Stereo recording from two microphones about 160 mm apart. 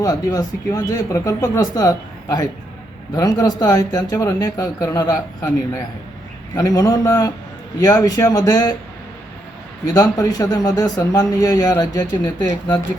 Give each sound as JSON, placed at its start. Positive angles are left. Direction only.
{"t": 0.0, "sound": "a man's voice", "side_deg": 25}
{"t": 9.8, "sound": "a man's voice", "side_deg": 25}